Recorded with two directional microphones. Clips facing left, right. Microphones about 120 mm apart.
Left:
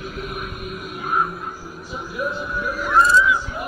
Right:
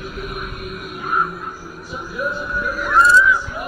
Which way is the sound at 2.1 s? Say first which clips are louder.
Right 2 dB; 20° left (ahead or behind).